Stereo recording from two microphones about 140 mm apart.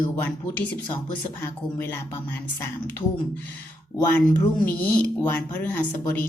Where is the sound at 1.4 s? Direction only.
15° left (ahead or behind).